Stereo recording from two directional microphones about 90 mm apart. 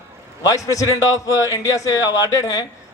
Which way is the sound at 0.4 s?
35° left (ahead or behind).